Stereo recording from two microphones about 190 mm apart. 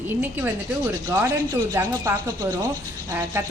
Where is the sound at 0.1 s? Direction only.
10° right (ahead or behind).